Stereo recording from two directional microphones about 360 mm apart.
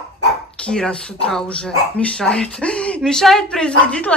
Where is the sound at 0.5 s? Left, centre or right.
Centre.